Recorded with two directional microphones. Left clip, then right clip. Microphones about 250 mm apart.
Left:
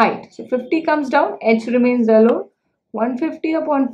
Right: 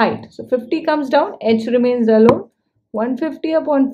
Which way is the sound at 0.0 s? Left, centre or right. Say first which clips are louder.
Left 1 dB; right.